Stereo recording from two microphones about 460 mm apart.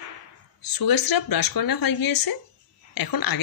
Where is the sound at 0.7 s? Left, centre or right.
Left.